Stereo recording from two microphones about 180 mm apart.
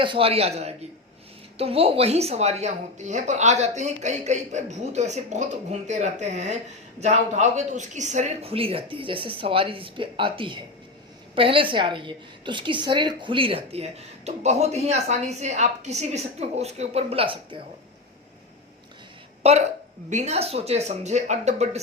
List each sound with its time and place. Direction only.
0.0 s a woman's voice: 30° right (ahead or behind)
19.4 s a woman's voice: 35° right (ahead or behind)